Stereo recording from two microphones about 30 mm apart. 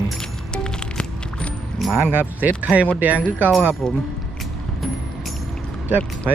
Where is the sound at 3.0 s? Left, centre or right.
Right.